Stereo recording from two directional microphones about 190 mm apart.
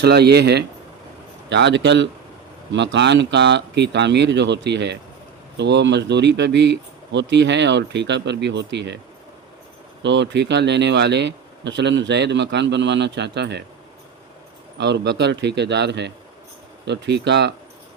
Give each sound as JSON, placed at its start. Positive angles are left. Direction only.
{"t": 0.0, "sound": "speech", "side_deg": -60}
{"t": 10.0, "sound": "speech", "side_deg": -70}
{"t": 14.8, "sound": "speech", "side_deg": -65}